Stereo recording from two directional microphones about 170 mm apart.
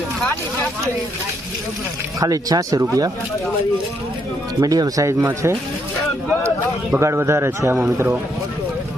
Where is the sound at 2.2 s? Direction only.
20° right (ahead or behind).